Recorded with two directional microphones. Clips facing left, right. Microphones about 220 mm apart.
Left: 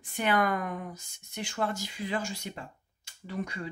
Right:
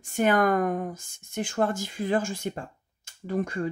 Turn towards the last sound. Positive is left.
turn(degrees=-50)  # may be behind; listen again after turning